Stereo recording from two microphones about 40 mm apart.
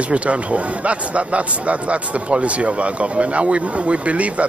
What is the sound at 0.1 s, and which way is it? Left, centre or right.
Speech, right.